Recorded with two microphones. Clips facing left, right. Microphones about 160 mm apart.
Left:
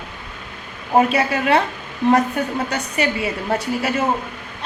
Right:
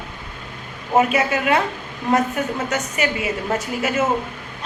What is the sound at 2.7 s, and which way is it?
A woman's voice, 35° left (ahead or behind).